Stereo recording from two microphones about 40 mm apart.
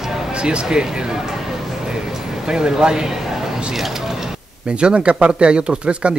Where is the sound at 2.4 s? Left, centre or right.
Centre.